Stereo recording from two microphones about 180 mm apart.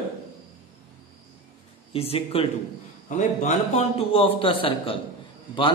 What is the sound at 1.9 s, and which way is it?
Speech, 35° left (ahead or behind).